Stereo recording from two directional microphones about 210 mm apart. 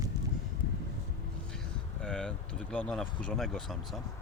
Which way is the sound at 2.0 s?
5° left (ahead or behind).